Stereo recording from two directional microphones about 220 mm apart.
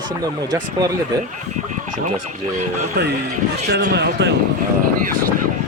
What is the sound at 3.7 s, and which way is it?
Speech, 50° right (ahead or behind).